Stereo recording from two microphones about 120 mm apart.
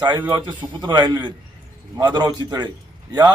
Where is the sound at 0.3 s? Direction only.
40° right (ahead or behind).